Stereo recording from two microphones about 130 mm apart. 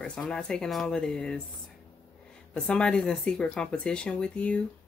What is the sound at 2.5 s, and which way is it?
Speech, 5° left (ahead or behind).